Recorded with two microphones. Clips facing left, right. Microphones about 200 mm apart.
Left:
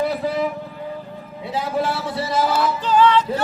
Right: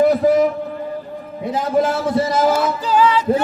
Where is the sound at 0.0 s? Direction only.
45° right (ahead or behind).